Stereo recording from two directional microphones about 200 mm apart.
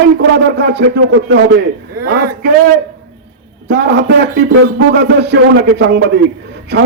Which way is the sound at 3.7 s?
60° right (ahead or behind).